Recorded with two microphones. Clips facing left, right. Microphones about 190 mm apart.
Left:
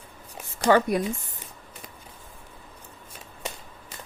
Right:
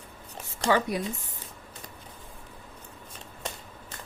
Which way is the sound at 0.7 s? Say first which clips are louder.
Left 5 dB; 50° left (ahead or behind).